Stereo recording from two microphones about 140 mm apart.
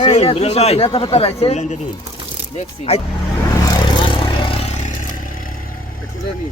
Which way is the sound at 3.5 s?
25° left (ahead or behind).